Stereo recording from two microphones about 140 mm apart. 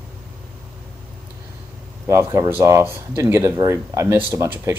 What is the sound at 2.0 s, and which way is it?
Speech, 20° right (ahead or behind).